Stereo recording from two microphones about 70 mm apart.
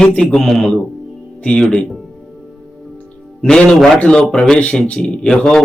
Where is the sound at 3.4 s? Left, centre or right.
Centre.